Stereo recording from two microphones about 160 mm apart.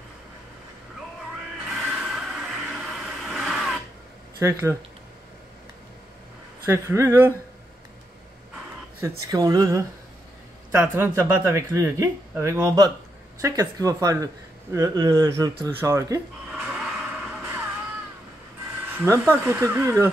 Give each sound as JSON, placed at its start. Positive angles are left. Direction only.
{"t": 1.7, "sound": "a sound", "side_deg": -5}
{"t": 4.4, "sound": "speech", "side_deg": -15}
{"t": 6.7, "sound": "speech", "side_deg": -15}
{"t": 9.3, "sound": "speech", "side_deg": -25}
{"t": 16.5, "sound": "music", "side_deg": -5}
{"t": 18.9, "sound": "speech", "side_deg": -15}